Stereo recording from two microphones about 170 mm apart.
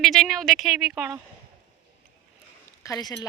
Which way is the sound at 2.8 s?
20° left (ahead or behind).